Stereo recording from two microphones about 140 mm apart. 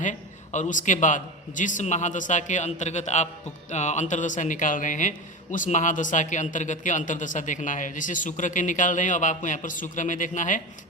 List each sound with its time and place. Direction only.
0.0 s speech: 60° left (ahead or behind)